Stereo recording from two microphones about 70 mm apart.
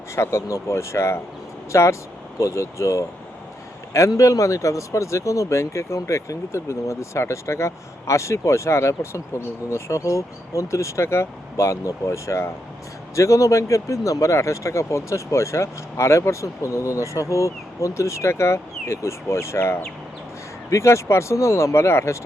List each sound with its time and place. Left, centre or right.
0.2 s speech: left
4.2 s speech: left